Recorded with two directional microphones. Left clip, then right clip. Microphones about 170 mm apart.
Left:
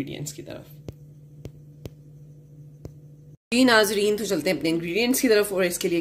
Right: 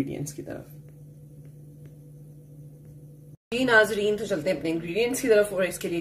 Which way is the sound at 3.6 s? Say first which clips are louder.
Even; 70° left (ahead or behind).